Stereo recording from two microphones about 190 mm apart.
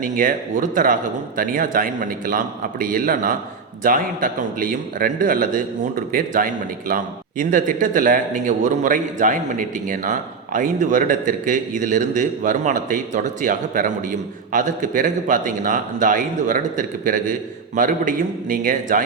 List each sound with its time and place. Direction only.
0.0 s a man's voice: 45° right (ahead or behind)